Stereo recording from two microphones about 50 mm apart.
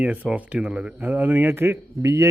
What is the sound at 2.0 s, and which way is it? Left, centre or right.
Speech, right.